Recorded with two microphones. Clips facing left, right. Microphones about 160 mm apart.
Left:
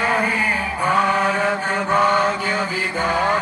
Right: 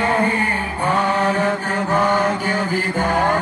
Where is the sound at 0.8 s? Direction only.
35° right (ahead or behind).